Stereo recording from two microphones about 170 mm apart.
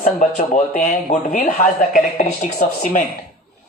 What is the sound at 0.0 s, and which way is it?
Speech, 45° left (ahead or behind).